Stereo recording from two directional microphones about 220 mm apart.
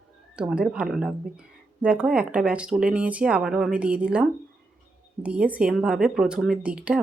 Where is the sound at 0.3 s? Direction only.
5° right (ahead or behind).